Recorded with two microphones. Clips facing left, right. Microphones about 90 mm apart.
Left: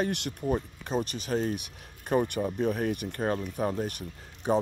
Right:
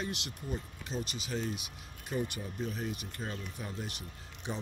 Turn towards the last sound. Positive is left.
turn(degrees=50)  # may be behind; listen again after turning